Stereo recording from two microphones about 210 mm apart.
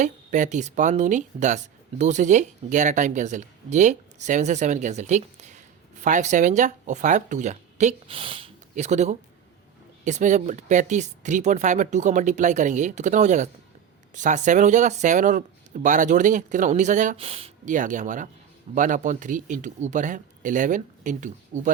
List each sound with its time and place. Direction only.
0.0 s speech: 35° right (ahead or behind)